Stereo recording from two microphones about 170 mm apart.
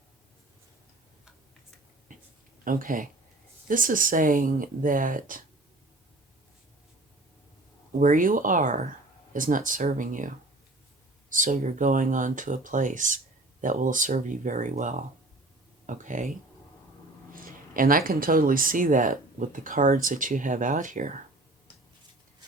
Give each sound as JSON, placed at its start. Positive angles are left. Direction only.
{"t": 2.6, "sound": "speech", "side_deg": -55}
{"t": 7.9, "sound": "speech", "side_deg": -50}
{"t": 17.3, "sound": "speech", "side_deg": -55}